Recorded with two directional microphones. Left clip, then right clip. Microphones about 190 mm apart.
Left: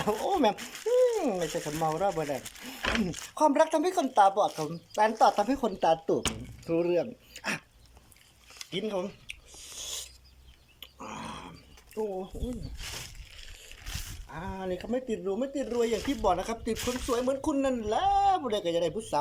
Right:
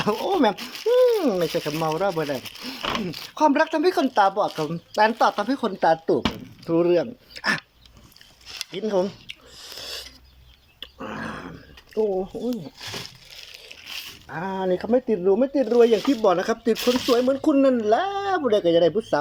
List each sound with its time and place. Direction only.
0.0 s speech: 5° right (ahead or behind)
8.8 s speech: 10° right (ahead or behind)
9.7 s a sound: 10° right (ahead or behind)
11.0 s dog: 10° right (ahead or behind)
11.9 s speech: 15° right (ahead or behind)
13.9 s speech: 5° right (ahead or behind)
16.7 s speech: 25° right (ahead or behind)
17.4 s speech: 10° right (ahead or behind)